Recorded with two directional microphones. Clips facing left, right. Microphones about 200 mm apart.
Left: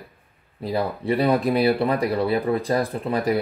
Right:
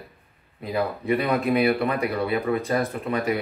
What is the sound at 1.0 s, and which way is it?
Speech, 30° left (ahead or behind).